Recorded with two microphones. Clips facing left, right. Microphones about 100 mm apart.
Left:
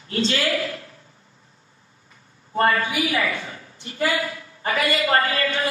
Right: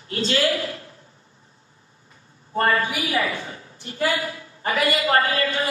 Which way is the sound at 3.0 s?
30° right (ahead or behind).